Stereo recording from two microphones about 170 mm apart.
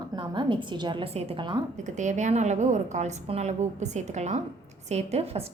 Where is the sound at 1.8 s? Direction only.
45° right (ahead or behind).